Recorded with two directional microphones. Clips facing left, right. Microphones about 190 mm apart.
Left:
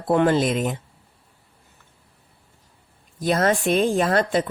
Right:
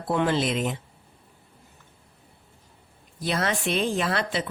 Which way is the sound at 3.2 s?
45° left (ahead or behind).